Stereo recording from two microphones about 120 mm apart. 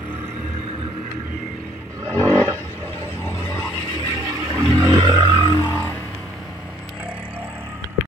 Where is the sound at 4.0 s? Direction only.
30° right (ahead or behind).